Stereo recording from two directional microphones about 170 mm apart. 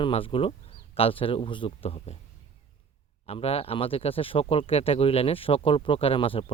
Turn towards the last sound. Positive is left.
turn(degrees=30)  # may be behind; listen again after turning